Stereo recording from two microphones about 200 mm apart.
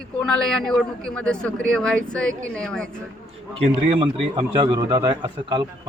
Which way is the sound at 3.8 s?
25° right (ahead or behind).